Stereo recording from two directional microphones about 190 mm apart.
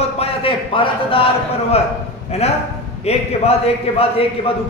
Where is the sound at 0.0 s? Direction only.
30° left (ahead or behind).